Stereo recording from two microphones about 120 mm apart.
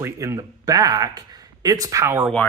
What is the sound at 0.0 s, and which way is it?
Speech, 25° right (ahead or behind).